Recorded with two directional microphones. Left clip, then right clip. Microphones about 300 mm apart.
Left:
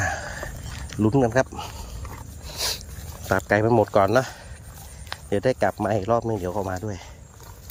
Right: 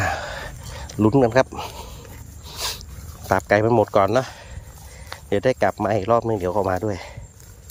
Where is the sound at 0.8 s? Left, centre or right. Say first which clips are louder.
Right 4 dB; centre.